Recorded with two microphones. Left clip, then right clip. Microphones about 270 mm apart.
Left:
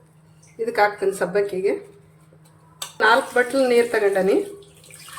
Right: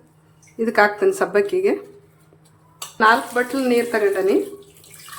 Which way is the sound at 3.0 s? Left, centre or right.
Centre.